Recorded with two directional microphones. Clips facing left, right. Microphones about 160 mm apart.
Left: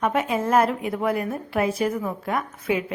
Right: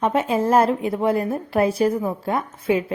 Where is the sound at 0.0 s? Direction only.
30° right (ahead or behind).